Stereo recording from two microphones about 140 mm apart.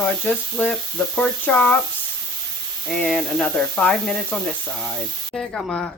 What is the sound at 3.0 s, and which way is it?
Speech, 5° left (ahead or behind).